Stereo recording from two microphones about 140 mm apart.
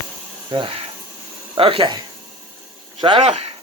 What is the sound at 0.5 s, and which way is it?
Speech, 35° right (ahead or behind).